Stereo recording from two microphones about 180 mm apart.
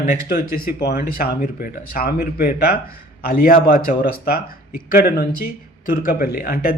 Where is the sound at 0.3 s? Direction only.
55° left (ahead or behind).